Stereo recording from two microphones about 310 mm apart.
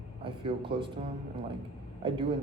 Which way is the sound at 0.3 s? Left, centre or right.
Centre.